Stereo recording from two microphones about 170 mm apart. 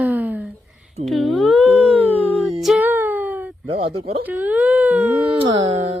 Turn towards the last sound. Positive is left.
turn(degrees=-40)  # may be behind; listen again after turning